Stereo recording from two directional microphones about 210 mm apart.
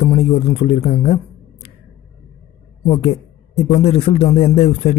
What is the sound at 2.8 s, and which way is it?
A man's voice, 30° left (ahead or behind).